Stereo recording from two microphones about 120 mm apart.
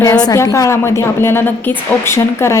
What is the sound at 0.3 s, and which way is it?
A woman's voice, 30° left (ahead or behind).